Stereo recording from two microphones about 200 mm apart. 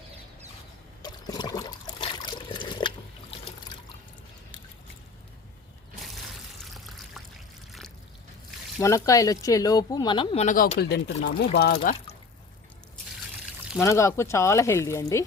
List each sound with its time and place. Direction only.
1.0 s trickle: 20° left (ahead or behind)
6.7 s trickle: centre (ahead or behind)
8.8 s speech: 15° left (ahead or behind)
10.4 s speech: 40° left (ahead or behind)
13.3 s pour: centre (ahead or behind)
13.8 s speech: 15° left (ahead or behind)